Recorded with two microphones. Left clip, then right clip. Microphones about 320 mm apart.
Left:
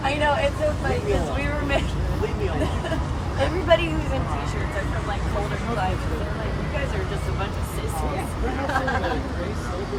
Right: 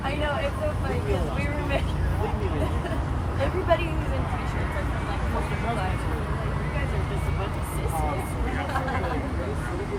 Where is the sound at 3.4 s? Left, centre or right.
Left.